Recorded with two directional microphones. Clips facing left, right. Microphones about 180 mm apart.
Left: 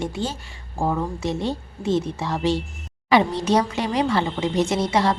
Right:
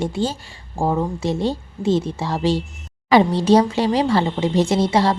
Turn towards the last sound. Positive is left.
turn(degrees=-30)  # may be behind; listen again after turning